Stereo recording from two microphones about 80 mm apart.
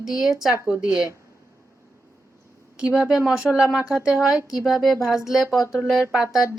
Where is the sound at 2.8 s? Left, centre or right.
Centre.